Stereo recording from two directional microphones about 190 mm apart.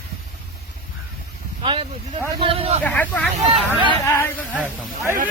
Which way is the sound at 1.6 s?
25° right (ahead or behind).